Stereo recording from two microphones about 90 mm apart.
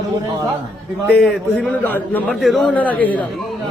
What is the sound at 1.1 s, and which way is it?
A man's voice, 10° left (ahead or behind).